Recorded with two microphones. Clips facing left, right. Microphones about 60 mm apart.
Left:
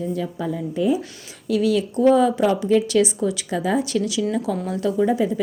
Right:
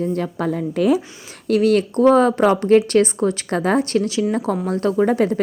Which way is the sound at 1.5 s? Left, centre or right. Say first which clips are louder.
Right 4 dB; right.